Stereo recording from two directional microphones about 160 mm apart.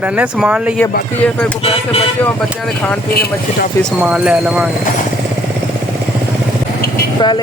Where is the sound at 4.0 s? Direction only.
5° right (ahead or behind).